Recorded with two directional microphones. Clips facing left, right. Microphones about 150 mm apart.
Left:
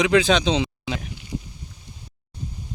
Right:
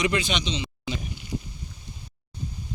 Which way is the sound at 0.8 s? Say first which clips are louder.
Left 3 dB; 90° left.